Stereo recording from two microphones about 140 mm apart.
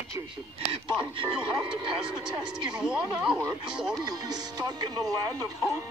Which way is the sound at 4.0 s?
30° right (ahead or behind).